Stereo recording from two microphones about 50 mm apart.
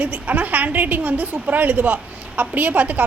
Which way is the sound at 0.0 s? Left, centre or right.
Right.